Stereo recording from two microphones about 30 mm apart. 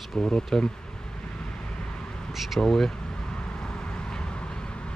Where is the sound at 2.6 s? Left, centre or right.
Centre.